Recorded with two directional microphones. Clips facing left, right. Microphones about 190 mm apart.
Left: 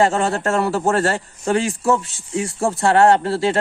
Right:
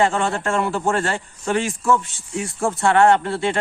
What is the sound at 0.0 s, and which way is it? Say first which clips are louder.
Speech: left 2 dB; 35° left (ahead or behind).